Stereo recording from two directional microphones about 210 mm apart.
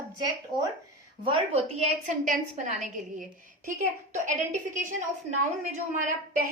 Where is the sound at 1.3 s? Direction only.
30° right (ahead or behind).